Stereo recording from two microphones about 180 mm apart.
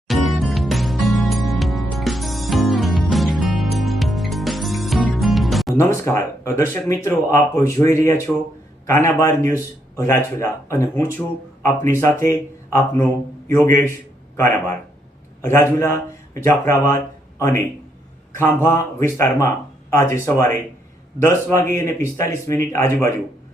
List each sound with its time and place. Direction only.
0.1 s music: centre (ahead or behind)
5.7 s speech: 15° left (ahead or behind)